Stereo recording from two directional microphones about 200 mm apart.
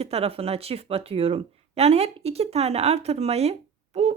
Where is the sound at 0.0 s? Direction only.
30° right (ahead or behind).